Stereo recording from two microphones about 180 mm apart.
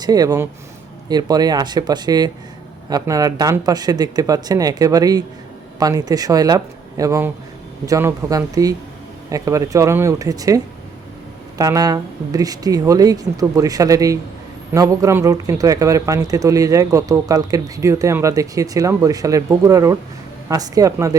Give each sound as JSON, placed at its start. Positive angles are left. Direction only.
{"t": 0.0, "sound": "a man's voice", "side_deg": -20}